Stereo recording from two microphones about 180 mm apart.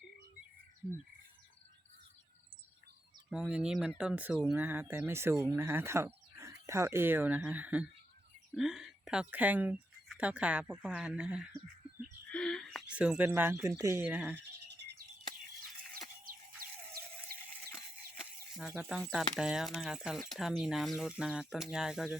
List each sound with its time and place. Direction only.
3.2 s speech: 5° right (ahead or behind)
14.3 s bird: 75° right (ahead or behind)
16.3 s music: 50° right (ahead or behind)
18.5 s speech: centre (ahead or behind)